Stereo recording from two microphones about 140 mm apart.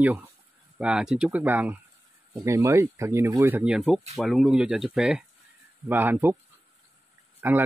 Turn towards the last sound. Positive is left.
turn(degrees=-15)  # may be behind; listen again after turning